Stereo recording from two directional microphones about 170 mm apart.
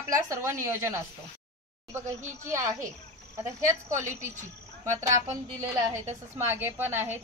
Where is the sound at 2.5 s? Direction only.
15° right (ahead or behind).